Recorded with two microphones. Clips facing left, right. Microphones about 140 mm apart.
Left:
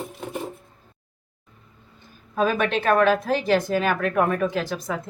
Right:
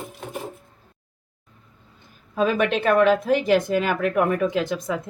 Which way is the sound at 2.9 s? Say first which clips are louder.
Right 1 dB; 15° right (ahead or behind).